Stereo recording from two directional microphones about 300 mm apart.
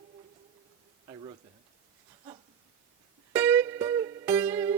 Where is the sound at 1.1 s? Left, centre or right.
Centre.